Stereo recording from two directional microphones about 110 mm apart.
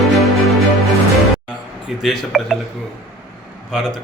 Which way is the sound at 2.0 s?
Centre (ahead or behind).